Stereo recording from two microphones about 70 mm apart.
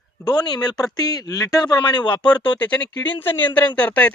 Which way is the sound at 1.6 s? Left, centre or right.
Left.